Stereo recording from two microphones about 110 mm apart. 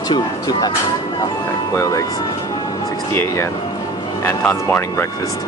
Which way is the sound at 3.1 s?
25° left (ahead or behind).